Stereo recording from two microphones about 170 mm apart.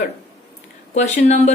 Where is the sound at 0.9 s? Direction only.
45° left (ahead or behind).